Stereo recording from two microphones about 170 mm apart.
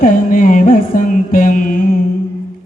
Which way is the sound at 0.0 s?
50° left (ahead or behind).